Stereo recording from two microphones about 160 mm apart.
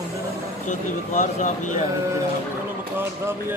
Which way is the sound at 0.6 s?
50° left (ahead or behind).